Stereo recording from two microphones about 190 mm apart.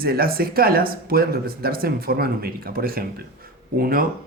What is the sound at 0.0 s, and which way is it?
Speech, 50° right (ahead or behind).